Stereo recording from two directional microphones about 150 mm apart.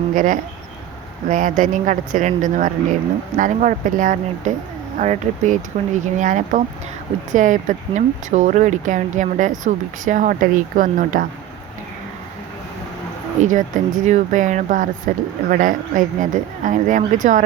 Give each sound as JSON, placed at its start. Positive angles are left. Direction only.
{"t": 0.1, "sound": "speech", "side_deg": -65}
{"t": 13.4, "sound": "speech", "side_deg": -60}